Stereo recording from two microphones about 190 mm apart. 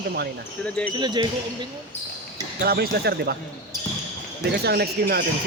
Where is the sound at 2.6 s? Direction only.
55° right (ahead or behind).